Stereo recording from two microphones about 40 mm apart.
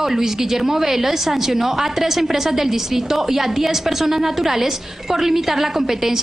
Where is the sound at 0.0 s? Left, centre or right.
Centre.